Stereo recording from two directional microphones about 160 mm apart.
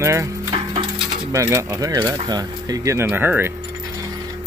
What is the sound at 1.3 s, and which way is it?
Speech, 20° right (ahead or behind).